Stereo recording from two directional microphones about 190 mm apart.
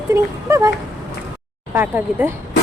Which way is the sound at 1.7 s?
10° right (ahead or behind).